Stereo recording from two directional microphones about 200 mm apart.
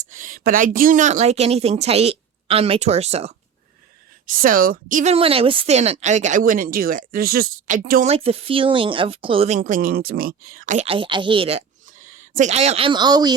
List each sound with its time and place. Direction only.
0.1 s speech: 40° right (ahead or behind)
4.3 s a woman's voice: 45° right (ahead or behind)
5.1 s speech: 30° right (ahead or behind)
8.1 s speech: 30° right (ahead or behind)
9.6 s speech: 40° right (ahead or behind); by 13.3 s 20° right (ahead or behind)